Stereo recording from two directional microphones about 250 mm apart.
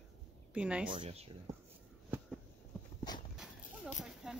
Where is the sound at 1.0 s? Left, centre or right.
Right.